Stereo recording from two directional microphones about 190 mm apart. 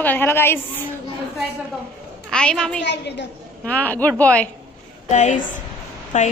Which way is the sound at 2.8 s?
65° left (ahead or behind).